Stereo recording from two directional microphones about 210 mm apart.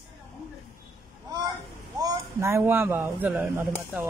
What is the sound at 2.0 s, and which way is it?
Speech, 15° right (ahead or behind).